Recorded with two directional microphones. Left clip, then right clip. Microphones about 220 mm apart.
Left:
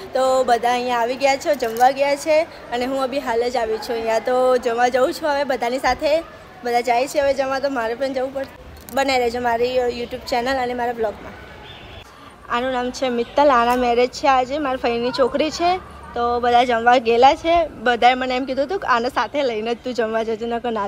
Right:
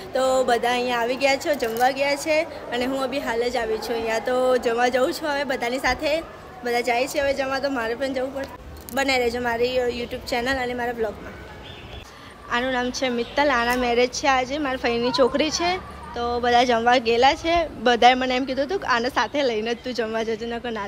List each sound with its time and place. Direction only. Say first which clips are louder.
0.1 s a woman's voice: left 3 dB; 5° right (ahead or behind)
12.4 s a woman's voice: left 2 dB; 10° right (ahead or behind)